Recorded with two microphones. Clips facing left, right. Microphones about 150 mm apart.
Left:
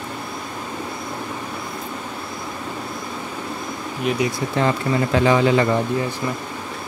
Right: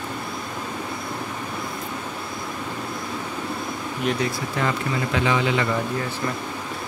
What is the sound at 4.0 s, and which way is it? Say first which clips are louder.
Speech: left 3 dB; 5° left (ahead or behind).